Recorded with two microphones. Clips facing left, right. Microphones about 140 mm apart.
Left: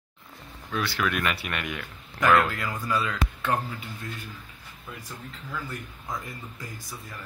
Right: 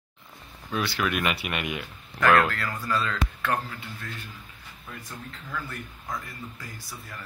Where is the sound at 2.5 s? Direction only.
15° left (ahead or behind).